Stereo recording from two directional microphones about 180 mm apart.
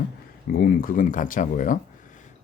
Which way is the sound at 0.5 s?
50° left (ahead or behind).